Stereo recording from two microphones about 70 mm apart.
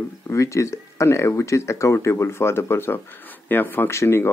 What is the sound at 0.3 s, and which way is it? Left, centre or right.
Speech, left.